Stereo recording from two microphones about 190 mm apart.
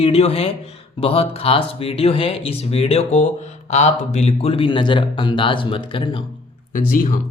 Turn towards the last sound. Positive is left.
turn(degrees=45)  # may be behind; listen again after turning